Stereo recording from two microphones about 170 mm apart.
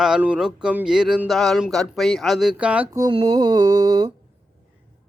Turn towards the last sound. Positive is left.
turn(degrees=-25)  # may be behind; listen again after turning